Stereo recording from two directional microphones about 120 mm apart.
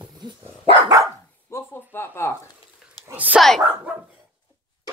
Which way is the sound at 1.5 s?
20° left (ahead or behind).